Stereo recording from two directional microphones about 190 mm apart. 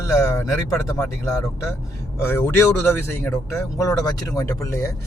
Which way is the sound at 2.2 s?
15° left (ahead or behind).